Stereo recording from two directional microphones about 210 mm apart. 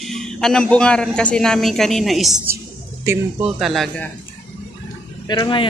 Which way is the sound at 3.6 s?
Centre (ahead or behind).